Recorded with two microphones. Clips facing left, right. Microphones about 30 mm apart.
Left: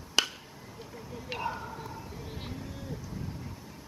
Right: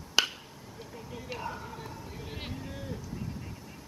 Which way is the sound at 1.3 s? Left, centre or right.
Centre.